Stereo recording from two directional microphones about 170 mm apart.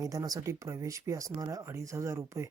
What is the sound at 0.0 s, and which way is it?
Speech, 20° right (ahead or behind).